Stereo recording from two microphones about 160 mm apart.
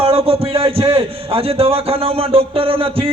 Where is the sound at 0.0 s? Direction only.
35° right (ahead or behind).